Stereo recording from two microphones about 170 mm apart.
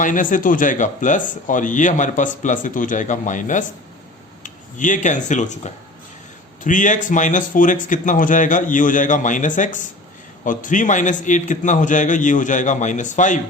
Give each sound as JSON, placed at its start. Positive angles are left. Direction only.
{"t": 0.0, "sound": "a man's voice", "side_deg": 50}
{"t": 6.6, "sound": "a man's voice", "side_deg": 50}